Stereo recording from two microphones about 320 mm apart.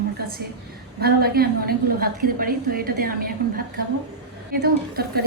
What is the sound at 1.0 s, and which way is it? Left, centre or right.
A woman's voice, right.